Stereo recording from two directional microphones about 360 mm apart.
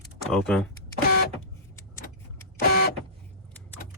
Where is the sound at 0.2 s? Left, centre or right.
Centre.